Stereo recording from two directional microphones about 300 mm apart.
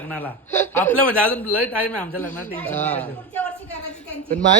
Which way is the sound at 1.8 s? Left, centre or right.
Centre.